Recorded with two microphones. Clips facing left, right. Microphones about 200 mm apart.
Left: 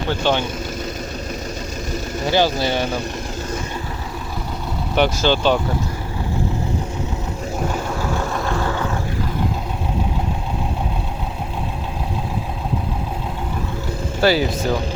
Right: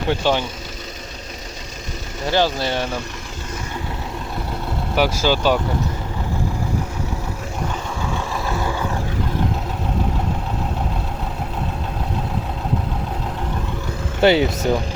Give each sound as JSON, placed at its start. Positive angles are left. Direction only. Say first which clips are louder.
{"t": 0.2, "sound": "speech", "louder": "left 1 dB", "side_deg": -10}
{"t": 2.2, "sound": "speech", "louder": "left 1 dB", "side_deg": 5}
{"t": 4.9, "sound": "speech", "louder": "left 1 dB", "side_deg": -5}
{"t": 8.4, "sound": "a sound", "louder": "left 2 dB", "side_deg": -10}
{"t": 14.2, "sound": "speech", "louder": "right 2 dB", "side_deg": -20}